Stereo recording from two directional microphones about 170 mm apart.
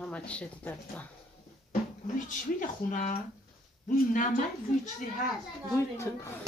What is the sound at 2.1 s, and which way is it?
Speech, 50° left (ahead or behind).